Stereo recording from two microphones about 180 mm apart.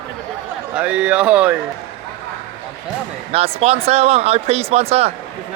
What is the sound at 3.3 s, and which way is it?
Speech, 35° right (ahead or behind).